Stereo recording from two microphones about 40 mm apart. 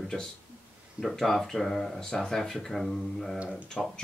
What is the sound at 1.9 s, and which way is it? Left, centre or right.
Speech, centre.